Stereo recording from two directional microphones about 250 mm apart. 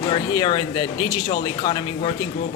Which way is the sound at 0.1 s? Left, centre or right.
Centre.